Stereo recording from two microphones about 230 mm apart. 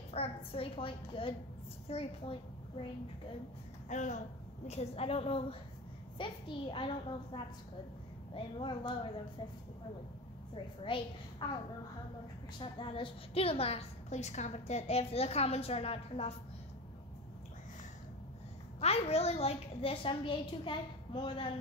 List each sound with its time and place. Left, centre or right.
0.1 s a woman's voice: left
3.9 s a woman's voice: left
8.5 s a woman's voice: left
10.5 s a woman's voice: left
12.5 s a woman's voice: left
18.8 s a woman's voice: left